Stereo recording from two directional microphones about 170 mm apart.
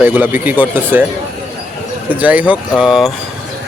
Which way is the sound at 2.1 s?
10° right (ahead or behind).